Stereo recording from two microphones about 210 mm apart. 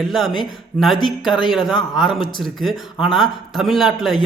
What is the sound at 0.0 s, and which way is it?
A man's voice, centre (ahead or behind).